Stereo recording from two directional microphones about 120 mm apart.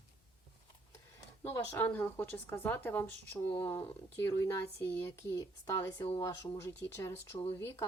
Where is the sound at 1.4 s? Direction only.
20° left (ahead or behind).